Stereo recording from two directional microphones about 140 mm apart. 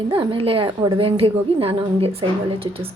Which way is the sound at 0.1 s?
40° right (ahead or behind).